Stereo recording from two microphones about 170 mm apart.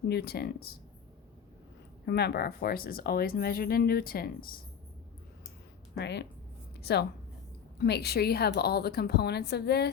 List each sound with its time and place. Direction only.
0.1 s a woman's voice: 70° left (ahead or behind)
2.0 s speech: 75° left (ahead or behind)
5.9 s a woman's voice: 90° left
7.8 s a woman's voice: 70° left (ahead or behind)